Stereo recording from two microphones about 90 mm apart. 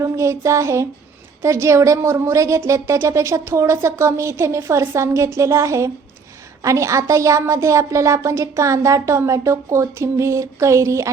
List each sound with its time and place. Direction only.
0.0 s a woman's voice: 35° right (ahead or behind)